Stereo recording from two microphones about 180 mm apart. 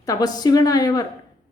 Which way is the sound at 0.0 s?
20° left (ahead or behind).